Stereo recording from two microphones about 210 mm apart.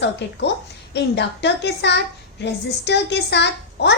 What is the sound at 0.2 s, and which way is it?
A woman's voice, 55° left (ahead or behind).